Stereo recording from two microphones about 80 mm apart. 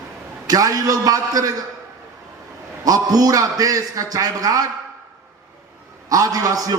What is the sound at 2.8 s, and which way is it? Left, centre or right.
A man's voice, right.